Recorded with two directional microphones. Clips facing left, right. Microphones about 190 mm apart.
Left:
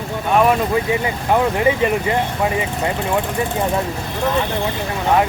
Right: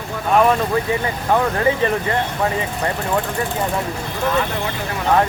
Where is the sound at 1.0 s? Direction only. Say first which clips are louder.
Left 1 dB; 15° left (ahead or behind).